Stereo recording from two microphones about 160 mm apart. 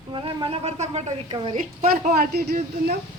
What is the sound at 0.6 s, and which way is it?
Speech, 40° right (ahead or behind).